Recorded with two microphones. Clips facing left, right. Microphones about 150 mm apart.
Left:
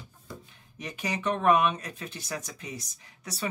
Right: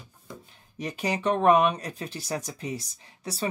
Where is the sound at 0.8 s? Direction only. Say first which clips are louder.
Right 4 dB; 35° right (ahead or behind).